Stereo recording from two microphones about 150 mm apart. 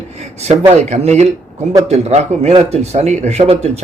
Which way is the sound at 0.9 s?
50° right (ahead or behind).